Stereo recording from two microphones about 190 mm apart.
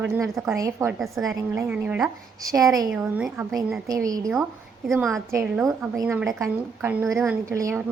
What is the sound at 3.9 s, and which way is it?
Speech, 20° right (ahead or behind).